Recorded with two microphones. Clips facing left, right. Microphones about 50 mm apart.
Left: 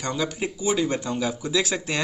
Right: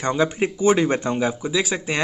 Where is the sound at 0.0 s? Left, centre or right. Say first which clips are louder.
Right 6 dB; right.